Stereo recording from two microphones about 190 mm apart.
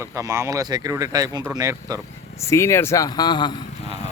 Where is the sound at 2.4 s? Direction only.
15° left (ahead or behind).